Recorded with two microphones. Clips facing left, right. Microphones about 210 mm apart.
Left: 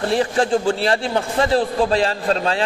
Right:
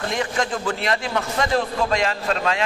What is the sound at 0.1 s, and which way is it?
A man's voice, 35° left (ahead or behind).